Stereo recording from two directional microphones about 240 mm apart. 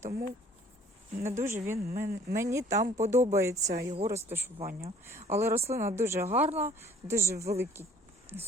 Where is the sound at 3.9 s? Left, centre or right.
Right.